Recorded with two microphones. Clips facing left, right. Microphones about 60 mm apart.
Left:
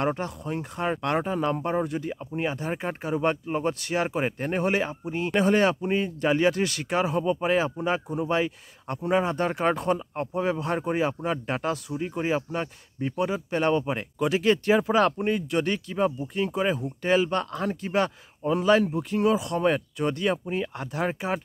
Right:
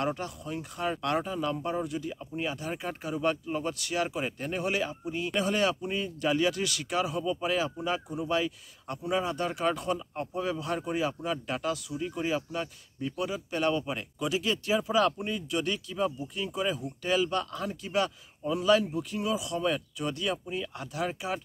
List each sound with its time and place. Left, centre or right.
0.0 s speech: left
14.1 s speech: left